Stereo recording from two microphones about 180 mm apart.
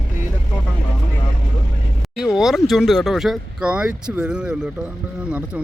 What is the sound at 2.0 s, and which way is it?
Speech, centre (ahead or behind).